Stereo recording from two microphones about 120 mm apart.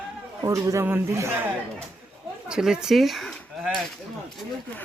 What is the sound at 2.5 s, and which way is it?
Speech, 5° right (ahead or behind).